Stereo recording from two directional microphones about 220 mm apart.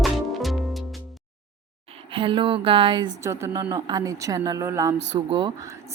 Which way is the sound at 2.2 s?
25° right (ahead or behind).